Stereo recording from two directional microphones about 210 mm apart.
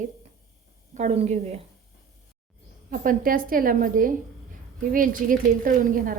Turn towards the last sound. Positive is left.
turn(degrees=-40)  # may be behind; listen again after turning